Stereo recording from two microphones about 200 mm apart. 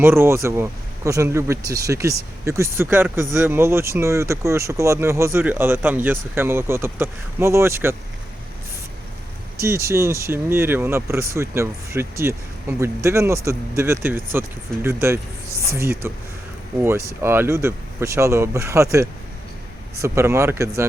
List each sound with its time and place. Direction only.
0.0 s speech: 10° right (ahead or behind)
9.6 s speech: 15° right (ahead or behind)